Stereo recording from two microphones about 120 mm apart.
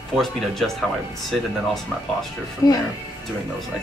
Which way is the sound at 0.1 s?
Centre (ahead or behind).